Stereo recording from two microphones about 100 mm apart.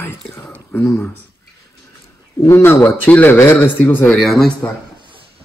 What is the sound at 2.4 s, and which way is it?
A man's voice, 25° left (ahead or behind).